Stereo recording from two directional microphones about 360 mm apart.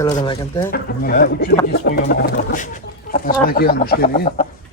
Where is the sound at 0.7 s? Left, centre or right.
Left.